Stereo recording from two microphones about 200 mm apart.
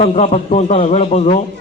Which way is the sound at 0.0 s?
30° left (ahead or behind).